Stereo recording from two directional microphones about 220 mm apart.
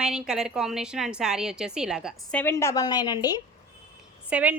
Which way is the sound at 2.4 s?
10° left (ahead or behind).